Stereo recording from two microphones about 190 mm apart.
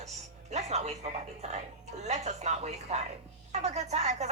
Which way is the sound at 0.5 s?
35° right (ahead or behind).